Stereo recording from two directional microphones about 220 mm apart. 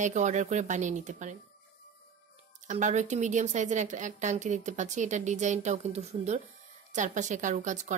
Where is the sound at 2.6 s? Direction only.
35° right (ahead or behind).